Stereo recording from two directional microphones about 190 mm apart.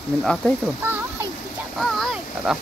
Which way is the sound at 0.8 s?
10° right (ahead or behind).